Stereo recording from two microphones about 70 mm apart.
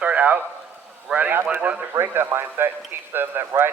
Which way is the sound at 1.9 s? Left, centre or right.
Right.